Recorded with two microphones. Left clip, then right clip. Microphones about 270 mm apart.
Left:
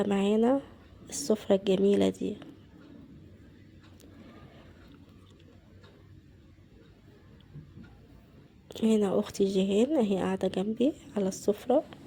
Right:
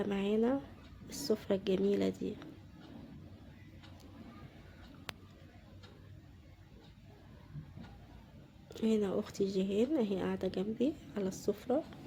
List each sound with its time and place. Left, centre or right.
0.0 s speech: left
8.7 s speech: left